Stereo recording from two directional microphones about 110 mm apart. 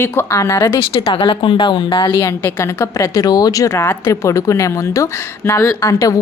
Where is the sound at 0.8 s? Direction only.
55° left (ahead or behind).